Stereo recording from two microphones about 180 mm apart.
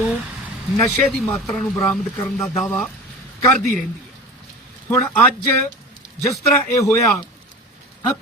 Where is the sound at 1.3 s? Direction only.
5° left (ahead or behind).